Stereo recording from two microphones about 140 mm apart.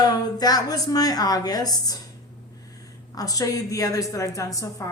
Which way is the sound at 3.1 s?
25° left (ahead or behind).